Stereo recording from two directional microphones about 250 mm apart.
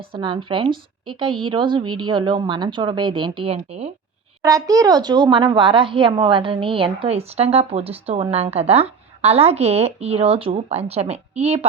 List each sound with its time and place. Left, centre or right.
0.1 s speech: centre
4.4 s speech: centre